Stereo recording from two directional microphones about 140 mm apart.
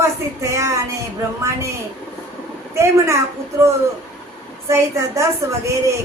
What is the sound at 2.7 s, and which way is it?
Speech, 20° right (ahead or behind).